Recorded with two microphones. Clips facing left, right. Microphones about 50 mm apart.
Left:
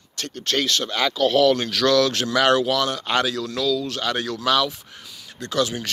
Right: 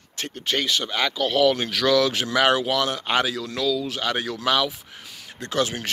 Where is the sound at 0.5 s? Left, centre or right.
Centre.